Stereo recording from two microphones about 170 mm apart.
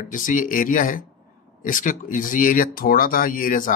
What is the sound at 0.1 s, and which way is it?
Speech, 50° left (ahead or behind).